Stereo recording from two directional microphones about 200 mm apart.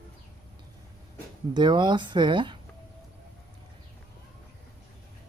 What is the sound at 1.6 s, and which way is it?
Speech, 25° right (ahead or behind).